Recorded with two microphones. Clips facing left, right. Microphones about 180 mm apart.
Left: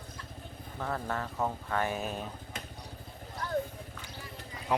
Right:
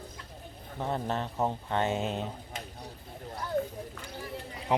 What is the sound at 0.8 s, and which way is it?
Speech, 25° right (ahead or behind).